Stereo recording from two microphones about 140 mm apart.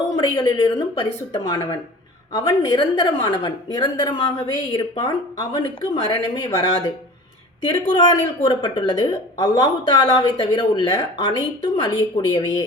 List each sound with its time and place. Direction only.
0.2 s speech: 30° left (ahead or behind)